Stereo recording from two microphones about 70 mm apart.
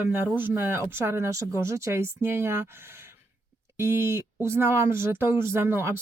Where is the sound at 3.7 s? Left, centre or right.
Right.